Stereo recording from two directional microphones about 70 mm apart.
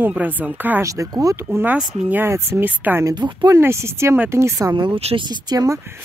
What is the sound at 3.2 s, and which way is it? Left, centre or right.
Speech, right.